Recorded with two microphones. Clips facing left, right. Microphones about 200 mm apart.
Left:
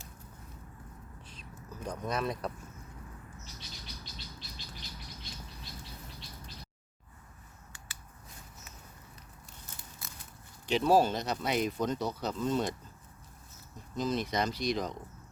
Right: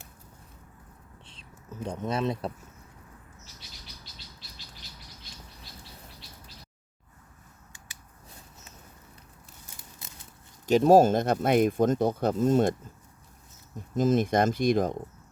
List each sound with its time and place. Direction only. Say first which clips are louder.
1.2 s speech: left 2 dB; 25° right (ahead or behind)
10.7 s speech: right 7 dB; 45° right (ahead or behind)
13.9 s speech: right 8 dB; 50° right (ahead or behind)